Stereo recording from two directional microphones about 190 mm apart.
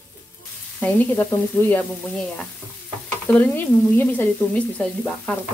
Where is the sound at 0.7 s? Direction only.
5° left (ahead or behind).